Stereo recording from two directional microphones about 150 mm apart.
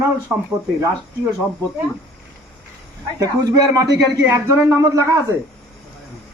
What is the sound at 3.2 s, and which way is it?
A man's voice, 25° right (ahead or behind).